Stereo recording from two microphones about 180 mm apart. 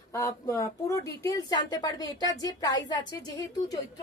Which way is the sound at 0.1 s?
20° left (ahead or behind).